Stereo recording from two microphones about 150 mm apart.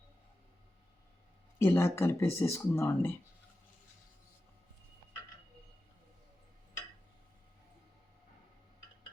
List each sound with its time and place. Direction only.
1.5 s speech: 15° left (ahead or behind)